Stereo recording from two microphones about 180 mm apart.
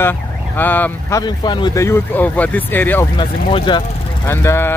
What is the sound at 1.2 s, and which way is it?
Speech, 25° left (ahead or behind).